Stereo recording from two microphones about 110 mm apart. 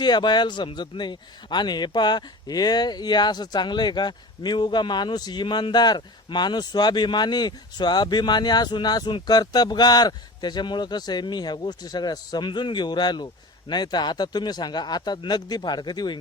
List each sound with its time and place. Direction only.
0.0 s a man's voice: 40° left (ahead or behind)